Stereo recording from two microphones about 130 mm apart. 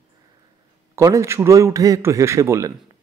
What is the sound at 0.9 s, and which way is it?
Speech, 25° right (ahead or behind).